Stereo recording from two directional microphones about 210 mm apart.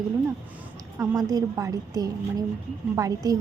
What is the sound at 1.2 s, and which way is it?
Speech, 20° right (ahead or behind).